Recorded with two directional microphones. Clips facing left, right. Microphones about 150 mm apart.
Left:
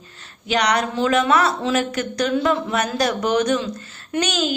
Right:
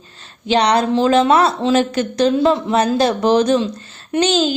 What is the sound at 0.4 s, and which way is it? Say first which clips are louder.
A woman's voice: right 5 dB; 30° right (ahead or behind).